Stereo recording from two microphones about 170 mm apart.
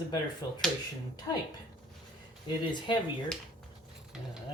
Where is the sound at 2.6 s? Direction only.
25° left (ahead or behind).